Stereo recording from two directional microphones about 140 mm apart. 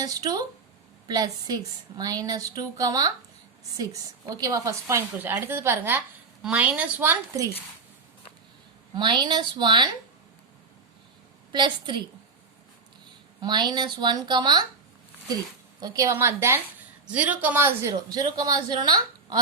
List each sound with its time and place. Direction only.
0.0 s a woman's voice: 25° right (ahead or behind)
9.0 s a woman's voice: 35° right (ahead or behind)
11.5 s a woman's voice: 35° right (ahead or behind)
13.4 s a woman's voice: 30° right (ahead or behind)
15.8 s a woman's voice: 25° right (ahead or behind)
18.1 s a woman's voice: 30° right (ahead or behind)